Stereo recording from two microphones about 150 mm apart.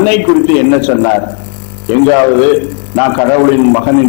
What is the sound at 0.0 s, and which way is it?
A man's voice, 10° left (ahead or behind).